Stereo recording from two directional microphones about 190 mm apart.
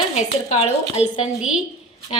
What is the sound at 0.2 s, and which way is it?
A woman's voice, 35° left (ahead or behind).